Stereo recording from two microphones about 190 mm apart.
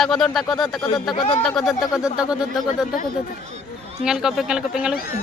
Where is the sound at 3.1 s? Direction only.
35° right (ahead or behind).